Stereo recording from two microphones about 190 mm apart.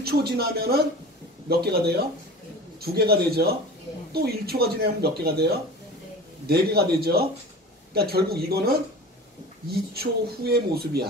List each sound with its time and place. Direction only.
0.0 s speech: 55° right (ahead or behind)